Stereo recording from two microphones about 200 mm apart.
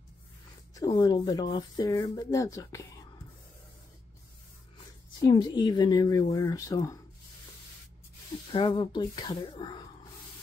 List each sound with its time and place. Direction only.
0.7 s speech: 20° left (ahead or behind)
5.2 s speech: 20° left (ahead or behind)
8.5 s speech: 25° left (ahead or behind)